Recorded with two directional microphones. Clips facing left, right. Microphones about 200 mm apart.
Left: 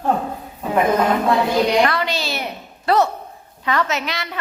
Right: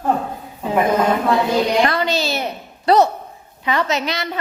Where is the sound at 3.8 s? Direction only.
35° right (ahead or behind).